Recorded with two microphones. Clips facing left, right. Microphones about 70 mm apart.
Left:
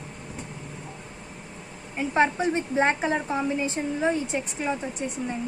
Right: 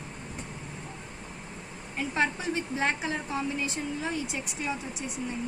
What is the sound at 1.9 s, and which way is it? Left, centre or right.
A woman's voice, left.